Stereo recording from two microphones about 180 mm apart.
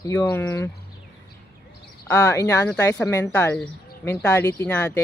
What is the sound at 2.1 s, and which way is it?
Speech, 15° left (ahead or behind).